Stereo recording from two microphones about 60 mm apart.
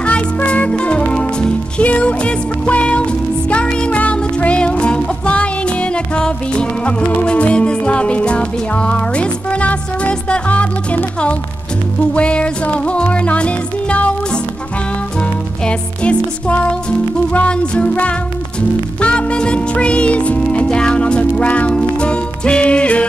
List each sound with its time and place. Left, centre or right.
0.0 s music: left
12.1 s music: centre